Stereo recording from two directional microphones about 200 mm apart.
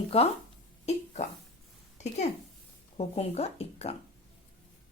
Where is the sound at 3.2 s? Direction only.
30° left (ahead or behind).